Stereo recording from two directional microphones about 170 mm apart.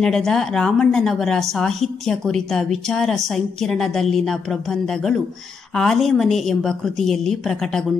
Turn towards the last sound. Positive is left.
turn(degrees=5)  # may be behind; listen again after turning